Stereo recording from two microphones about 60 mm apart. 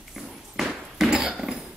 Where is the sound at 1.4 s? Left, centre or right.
Centre.